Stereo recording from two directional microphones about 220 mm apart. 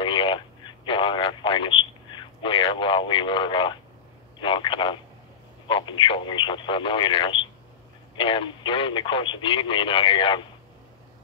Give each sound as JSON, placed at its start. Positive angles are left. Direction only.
{"t": 0.0, "sound": "radio", "side_deg": 20}
{"t": 0.8, "sound": "telephone", "side_deg": 20}
{"t": 4.4, "sound": "speech", "side_deg": 20}